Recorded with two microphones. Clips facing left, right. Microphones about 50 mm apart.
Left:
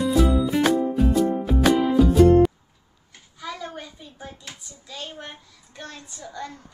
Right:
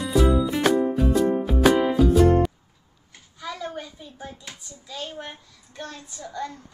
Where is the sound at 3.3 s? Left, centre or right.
Centre.